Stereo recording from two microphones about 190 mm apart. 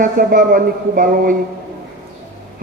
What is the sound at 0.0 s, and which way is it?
A man's voice, 45° right (ahead or behind).